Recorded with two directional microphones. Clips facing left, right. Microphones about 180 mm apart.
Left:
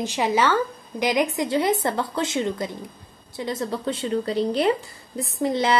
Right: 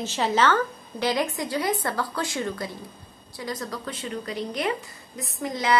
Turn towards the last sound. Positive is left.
turn(degrees=30)  # may be behind; listen again after turning